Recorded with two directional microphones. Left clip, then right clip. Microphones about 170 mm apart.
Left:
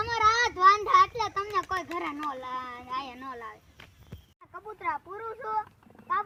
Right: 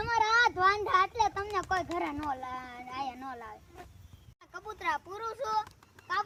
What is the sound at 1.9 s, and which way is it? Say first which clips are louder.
A child's voice: left 1 dB; 30° right (ahead or behind).